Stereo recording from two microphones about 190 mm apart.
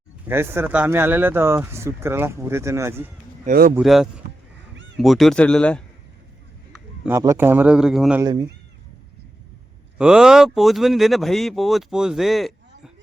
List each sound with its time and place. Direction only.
0.3 s speech: 10° right (ahead or behind)
3.4 s speech: 55° right (ahead or behind)
3.8 s speech: centre (ahead or behind)
7.0 s speech: 15° right (ahead or behind)
8.2 s speech: 20° right (ahead or behind)
10.0 s speech: 5° right (ahead or behind)